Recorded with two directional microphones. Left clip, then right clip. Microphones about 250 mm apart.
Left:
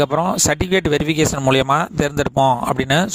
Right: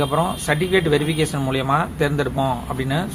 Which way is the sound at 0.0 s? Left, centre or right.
Left.